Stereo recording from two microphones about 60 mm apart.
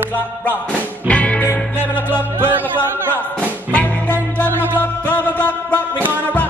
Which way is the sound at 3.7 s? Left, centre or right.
Left.